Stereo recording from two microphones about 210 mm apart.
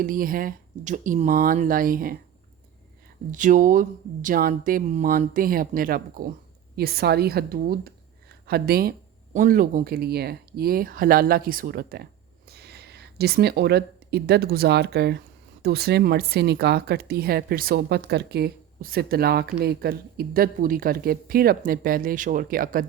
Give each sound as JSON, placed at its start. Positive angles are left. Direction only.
{"t": 0.0, "sound": "speech", "side_deg": -40}
{"t": 3.3, "sound": "speech", "side_deg": -40}